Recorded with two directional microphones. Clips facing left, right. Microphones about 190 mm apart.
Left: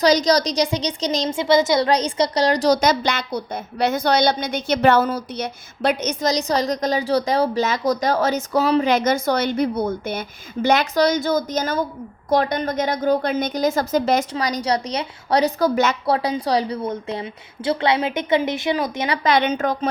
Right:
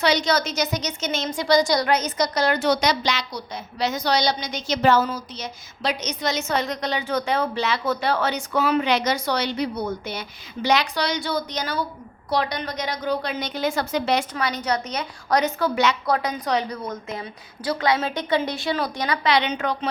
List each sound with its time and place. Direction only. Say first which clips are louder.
0.0 s a woman's voice: left 5 dB; 40° left (ahead or behind)
6.3 s a woman's voice: left 4 dB; 35° left (ahead or behind)
16.0 s a woman's voice: left 3 dB; 30° left (ahead or behind)
19.2 s a woman's voice: left 4 dB; 45° left (ahead or behind)